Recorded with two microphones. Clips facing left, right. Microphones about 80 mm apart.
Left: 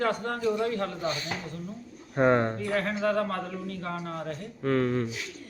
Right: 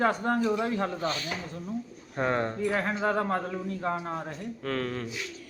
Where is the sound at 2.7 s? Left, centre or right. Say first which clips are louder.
Left 2 dB; right.